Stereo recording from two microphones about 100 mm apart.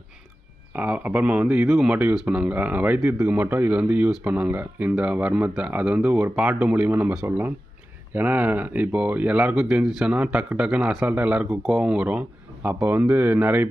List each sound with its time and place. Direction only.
0.7 s speech: 15° right (ahead or behind)